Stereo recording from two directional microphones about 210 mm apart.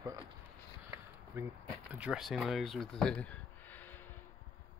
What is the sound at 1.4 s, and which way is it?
Speech, 10° right (ahead or behind).